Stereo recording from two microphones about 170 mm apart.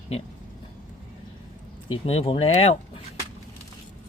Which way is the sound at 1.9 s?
35° left (ahead or behind).